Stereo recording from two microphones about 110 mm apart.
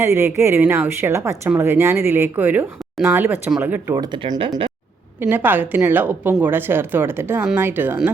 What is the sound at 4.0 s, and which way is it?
Speech, 40° right (ahead or behind).